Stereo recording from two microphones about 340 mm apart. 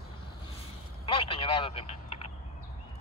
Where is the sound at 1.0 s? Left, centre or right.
Centre.